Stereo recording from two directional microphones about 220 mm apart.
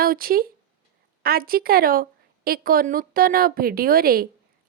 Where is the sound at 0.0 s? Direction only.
40° right (ahead or behind).